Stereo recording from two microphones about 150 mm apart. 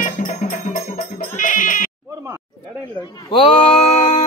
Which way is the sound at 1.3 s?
60° left (ahead or behind).